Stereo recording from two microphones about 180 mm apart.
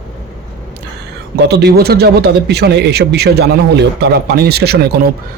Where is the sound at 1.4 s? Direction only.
65° right (ahead or behind).